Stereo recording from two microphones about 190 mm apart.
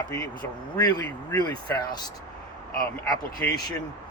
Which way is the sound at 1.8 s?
20° left (ahead or behind).